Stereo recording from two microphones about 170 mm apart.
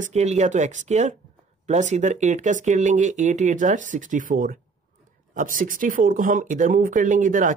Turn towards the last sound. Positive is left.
turn(degrees=-50)  # may be behind; listen again after turning